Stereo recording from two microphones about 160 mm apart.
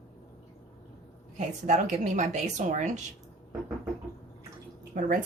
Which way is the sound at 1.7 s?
45° right (ahead or behind).